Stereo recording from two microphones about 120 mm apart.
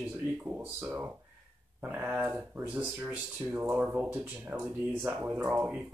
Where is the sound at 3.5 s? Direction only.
15° right (ahead or behind).